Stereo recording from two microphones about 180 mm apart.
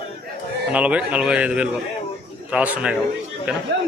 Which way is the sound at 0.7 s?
5° right (ahead or behind).